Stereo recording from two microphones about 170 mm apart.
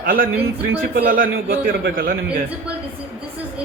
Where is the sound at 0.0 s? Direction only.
55° right (ahead or behind).